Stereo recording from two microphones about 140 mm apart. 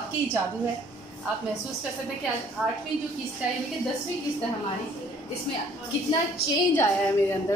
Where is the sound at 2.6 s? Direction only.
Centre (ahead or behind).